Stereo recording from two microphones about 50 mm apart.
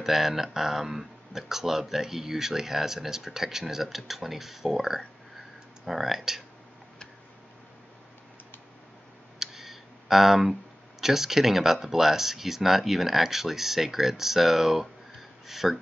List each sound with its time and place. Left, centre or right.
0.0 s speech: centre
9.4 s clicking: centre
11.0 s speech: centre